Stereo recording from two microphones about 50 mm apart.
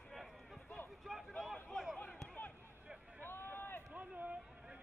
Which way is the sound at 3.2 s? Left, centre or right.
Left.